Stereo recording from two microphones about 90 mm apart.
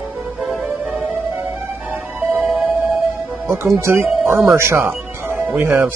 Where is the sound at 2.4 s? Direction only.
5° right (ahead or behind).